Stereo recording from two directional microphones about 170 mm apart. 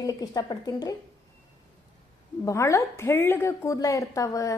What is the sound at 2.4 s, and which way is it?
A woman's voice, 15° left (ahead or behind).